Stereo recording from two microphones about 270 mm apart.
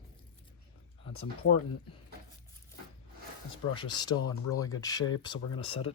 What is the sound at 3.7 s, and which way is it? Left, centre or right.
Speech, centre.